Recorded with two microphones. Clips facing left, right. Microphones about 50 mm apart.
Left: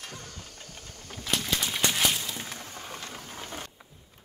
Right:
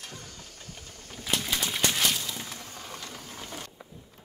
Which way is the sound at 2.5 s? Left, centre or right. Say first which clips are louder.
Left 1 dB; left.